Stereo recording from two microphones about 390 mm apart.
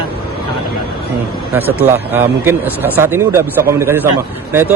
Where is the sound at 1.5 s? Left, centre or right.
Centre.